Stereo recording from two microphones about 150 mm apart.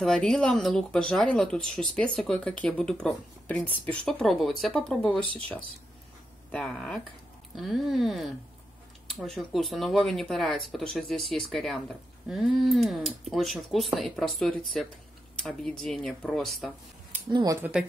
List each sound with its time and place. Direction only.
0.0 s speech: 5° left (ahead or behind)
6.5 s speech: 5° left (ahead or behind)
17.3 s speech: 30° right (ahead or behind)
17.6 s speech: 5° right (ahead or behind)